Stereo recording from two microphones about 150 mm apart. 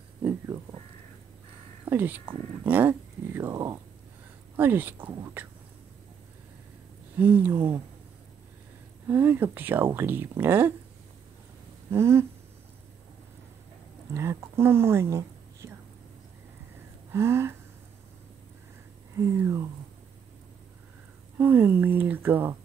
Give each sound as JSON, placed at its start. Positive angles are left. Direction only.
{"t": 0.2, "sound": "music", "side_deg": -20}
{"t": 1.9, "sound": "speech", "side_deg": -15}
{"t": 7.2, "sound": "speech", "side_deg": -10}
{"t": 9.0, "sound": "speech", "side_deg": -15}
{"t": 11.9, "sound": "speech", "side_deg": -15}
{"t": 14.1, "sound": "speech", "side_deg": -15}
{"t": 17.1, "sound": "speech", "side_deg": -15}
{"t": 19.1, "sound": "speech", "side_deg": -20}
{"t": 21.4, "sound": "speech", "side_deg": -15}